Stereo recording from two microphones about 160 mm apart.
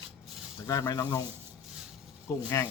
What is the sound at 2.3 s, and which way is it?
Speech, 15° left (ahead or behind).